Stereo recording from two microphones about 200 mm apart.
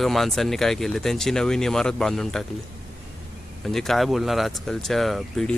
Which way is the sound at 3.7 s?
Centre (ahead or behind).